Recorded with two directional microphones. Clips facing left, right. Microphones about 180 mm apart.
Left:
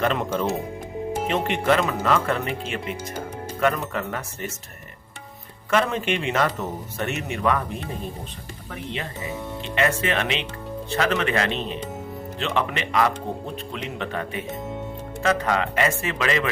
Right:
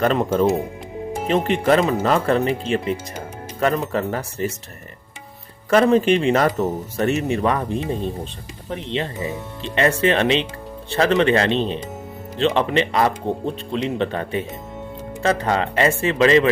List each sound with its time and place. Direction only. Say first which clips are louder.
0.0 s speech: right 6 dB; 40° right (ahead or behind)
5.7 s speech: right 8 dB; 40° right (ahead or behind)